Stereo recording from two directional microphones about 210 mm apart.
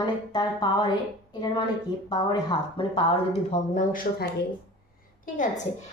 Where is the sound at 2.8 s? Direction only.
25° left (ahead or behind).